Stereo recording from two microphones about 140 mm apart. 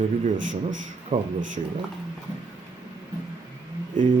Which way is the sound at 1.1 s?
50° right (ahead or behind).